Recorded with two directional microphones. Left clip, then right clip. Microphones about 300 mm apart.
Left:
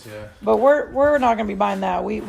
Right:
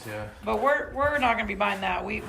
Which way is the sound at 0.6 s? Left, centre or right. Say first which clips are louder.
Left 8 dB; centre.